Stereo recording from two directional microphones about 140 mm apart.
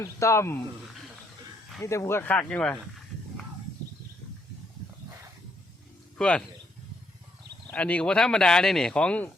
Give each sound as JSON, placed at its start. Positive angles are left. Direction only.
{"t": 0.0, "sound": "speech", "side_deg": 20}
{"t": 1.8, "sound": "speech", "side_deg": 20}
{"t": 6.1, "sound": "speech", "side_deg": 5}
{"t": 7.7, "sound": "speech", "side_deg": 10}